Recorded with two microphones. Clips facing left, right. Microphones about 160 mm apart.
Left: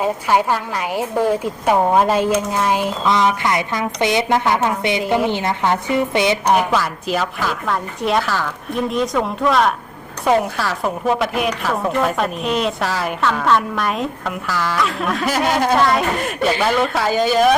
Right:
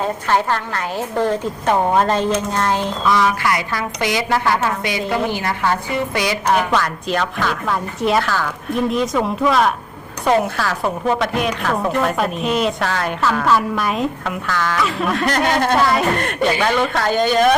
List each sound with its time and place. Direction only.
0.0 s a woman's voice: 10° left (ahead or behind)
3.1 s a woman's voice: 20° left (ahead or behind)
6.6 s a woman's voice: 5° left (ahead or behind)